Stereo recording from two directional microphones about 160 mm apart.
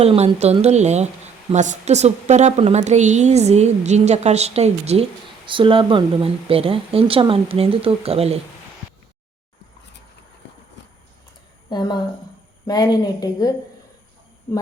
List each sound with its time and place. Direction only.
0.0 s a woman's voice: 35° right (ahead or behind)
11.7 s speech: 25° left (ahead or behind)